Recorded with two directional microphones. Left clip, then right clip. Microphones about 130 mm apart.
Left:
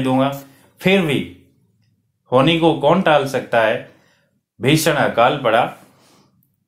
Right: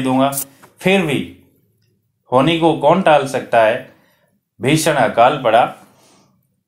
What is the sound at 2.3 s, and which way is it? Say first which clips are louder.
Speech: right 1 dB; 20° left (ahead or behind).